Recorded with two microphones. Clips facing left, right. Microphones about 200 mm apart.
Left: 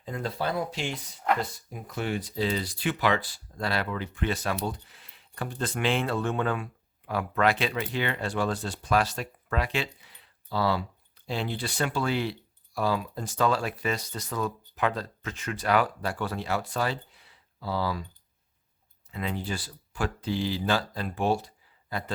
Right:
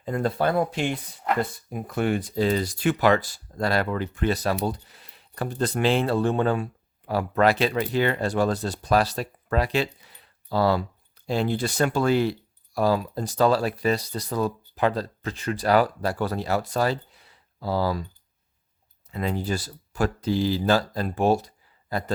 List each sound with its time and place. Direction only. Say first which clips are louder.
0.0 s speech: right 7 dB; 55° right (ahead or behind)
19.1 s speech: right 5 dB; 40° right (ahead or behind)